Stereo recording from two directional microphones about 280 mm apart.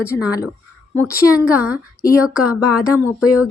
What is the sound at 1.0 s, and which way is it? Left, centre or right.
Speech, centre.